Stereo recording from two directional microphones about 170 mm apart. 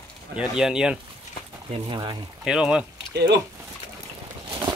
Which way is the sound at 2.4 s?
5° right (ahead or behind).